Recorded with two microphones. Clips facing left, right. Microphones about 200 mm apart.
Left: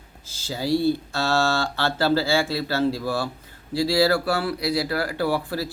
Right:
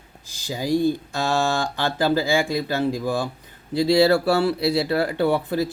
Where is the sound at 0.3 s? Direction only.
15° right (ahead or behind).